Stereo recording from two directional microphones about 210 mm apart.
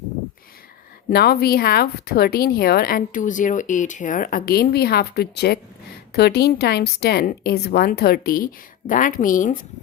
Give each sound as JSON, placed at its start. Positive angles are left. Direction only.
{"t": 1.1, "sound": "speech", "side_deg": 50}